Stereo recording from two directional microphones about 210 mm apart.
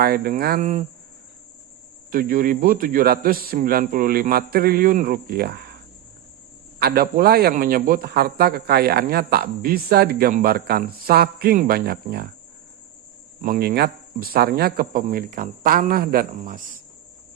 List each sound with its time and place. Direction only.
0.0 s a man's voice: 45° right (ahead or behind)
2.0 s a man's voice: 40° right (ahead or behind)
6.7 s a man's voice: 50° right (ahead or behind)
13.4 s a man's voice: 45° right (ahead or behind)